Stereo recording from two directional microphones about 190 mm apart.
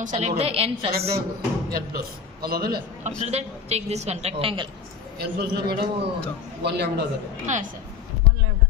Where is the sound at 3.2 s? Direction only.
35° right (ahead or behind).